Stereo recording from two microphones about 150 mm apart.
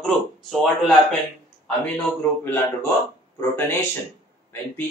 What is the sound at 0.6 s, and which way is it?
Speech, 5° left (ahead or behind).